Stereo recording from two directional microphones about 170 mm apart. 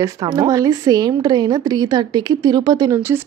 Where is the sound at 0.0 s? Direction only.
20° right (ahead or behind).